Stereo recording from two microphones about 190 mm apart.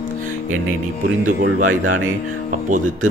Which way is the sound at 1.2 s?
90° right.